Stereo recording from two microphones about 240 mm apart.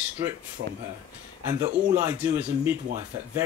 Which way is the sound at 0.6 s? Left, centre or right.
Right.